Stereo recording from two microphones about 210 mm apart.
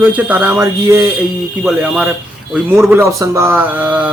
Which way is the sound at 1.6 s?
5° right (ahead or behind).